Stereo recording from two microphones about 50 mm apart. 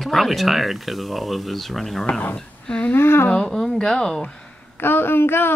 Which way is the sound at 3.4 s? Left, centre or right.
Centre.